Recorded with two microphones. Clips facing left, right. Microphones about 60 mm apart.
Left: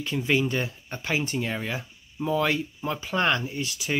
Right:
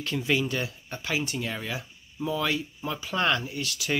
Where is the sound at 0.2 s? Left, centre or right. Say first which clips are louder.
Left 3 dB; left.